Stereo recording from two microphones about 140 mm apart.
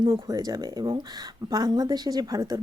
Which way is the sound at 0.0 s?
30° right (ahead or behind).